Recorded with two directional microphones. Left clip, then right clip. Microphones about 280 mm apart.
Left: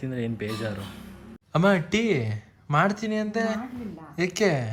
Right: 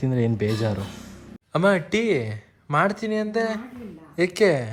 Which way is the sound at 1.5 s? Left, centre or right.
Centre.